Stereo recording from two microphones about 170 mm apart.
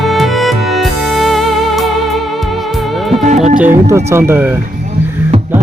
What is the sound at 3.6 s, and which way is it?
Speech, 15° right (ahead or behind).